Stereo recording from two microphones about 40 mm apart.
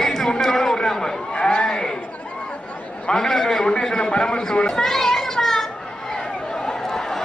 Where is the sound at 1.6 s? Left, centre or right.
Centre.